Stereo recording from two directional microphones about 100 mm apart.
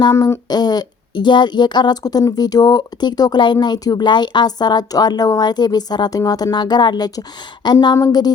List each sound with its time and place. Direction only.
0.0 s speech: 35° left (ahead or behind)